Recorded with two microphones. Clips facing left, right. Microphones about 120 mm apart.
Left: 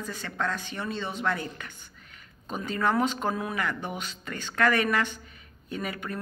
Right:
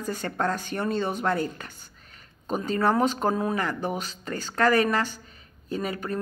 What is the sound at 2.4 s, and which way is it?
Speech, 35° right (ahead or behind).